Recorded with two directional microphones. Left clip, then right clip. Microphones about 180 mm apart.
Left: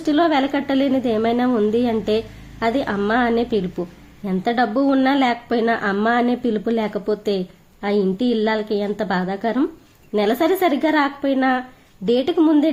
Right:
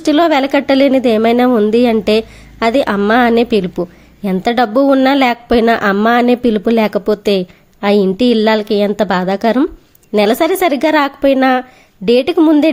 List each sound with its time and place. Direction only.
0.0 s a woman's voice: 30° right (ahead or behind)